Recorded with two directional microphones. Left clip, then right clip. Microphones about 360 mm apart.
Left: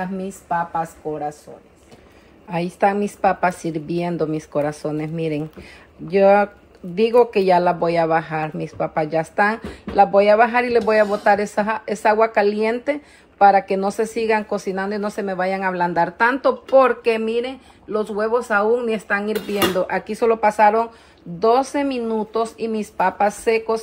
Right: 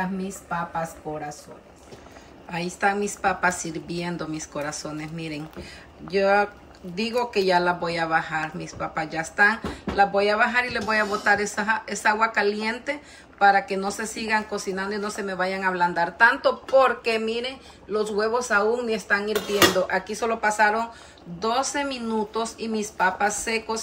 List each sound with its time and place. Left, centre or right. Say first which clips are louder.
0.0 s speech: left 2 dB; centre
2.5 s speech: left 5 dB; centre